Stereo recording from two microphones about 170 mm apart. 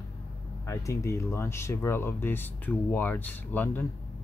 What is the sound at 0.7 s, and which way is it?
Speech, 15° left (ahead or behind).